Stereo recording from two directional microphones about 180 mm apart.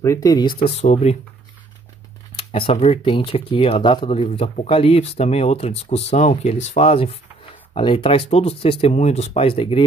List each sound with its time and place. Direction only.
0.0 s speech: 20° left (ahead or behind)
0.7 s speech: 35° left (ahead or behind)
2.3 s speech: 30° left (ahead or behind)